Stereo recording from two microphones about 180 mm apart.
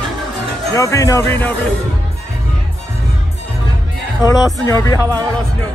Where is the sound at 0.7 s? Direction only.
20° left (ahead or behind).